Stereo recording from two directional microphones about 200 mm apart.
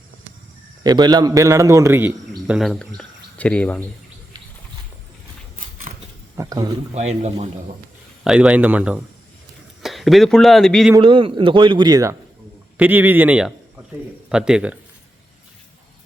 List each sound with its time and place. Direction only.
0.9 s a man's voice: 20° right (ahead or behind); by 3.8 s 5° left (ahead or behind)
6.3 s speech: 15° right (ahead or behind)
6.9 s a man's voice: 35° right (ahead or behind)
8.2 s speech: 5° right (ahead or behind)
10.9 s speech: 25° right (ahead or behind)
12.7 s speech: 10° right (ahead or behind)